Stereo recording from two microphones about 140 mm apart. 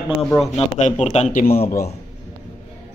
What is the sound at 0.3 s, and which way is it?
Speech, 25° left (ahead or behind).